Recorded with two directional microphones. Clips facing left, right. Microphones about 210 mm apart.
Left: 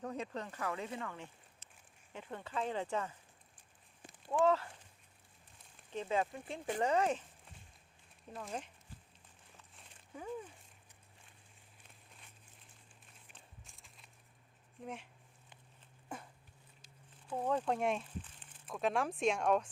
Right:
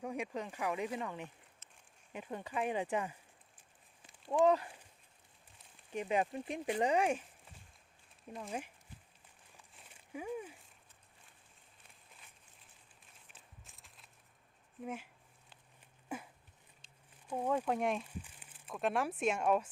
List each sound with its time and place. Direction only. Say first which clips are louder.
0.0 s speech: right 2 dB; 10° right (ahead or behind)
4.3 s speech: right 2 dB; 15° right (ahead or behind)
5.9 s speech: right 1 dB; 15° right (ahead or behind)
8.4 s speech: right 2 dB; 10° right (ahead or behind)
10.1 s speech: right 3 dB; 10° right (ahead or behind)
13.3 s a sound: left 1 dB; centre (ahead or behind)
14.8 s speech: right 3 dB; 5° right (ahead or behind)
16.0 s a sound: right 4 dB; 5° right (ahead or behind)
17.2 s speech: right 1 dB; 10° right (ahead or behind)